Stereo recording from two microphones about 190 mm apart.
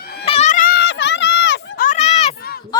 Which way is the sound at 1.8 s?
35° left (ahead or behind).